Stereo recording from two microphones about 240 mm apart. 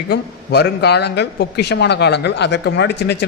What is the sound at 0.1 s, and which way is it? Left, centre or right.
Speech, left.